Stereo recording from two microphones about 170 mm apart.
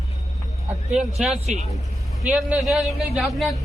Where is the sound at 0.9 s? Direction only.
5° right (ahead or behind).